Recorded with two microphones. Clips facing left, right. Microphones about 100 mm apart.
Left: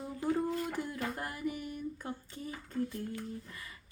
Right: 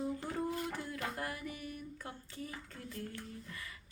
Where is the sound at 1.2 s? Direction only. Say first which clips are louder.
Left 4 dB; 25° left (ahead or behind).